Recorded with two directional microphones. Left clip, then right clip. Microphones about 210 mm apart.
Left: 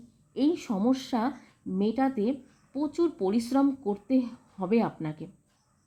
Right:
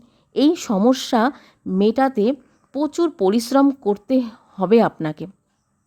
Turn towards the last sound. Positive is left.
turn(degrees=-55)  # may be behind; listen again after turning